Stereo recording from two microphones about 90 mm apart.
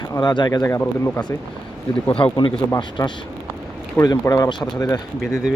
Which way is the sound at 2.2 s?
60° left (ahead or behind).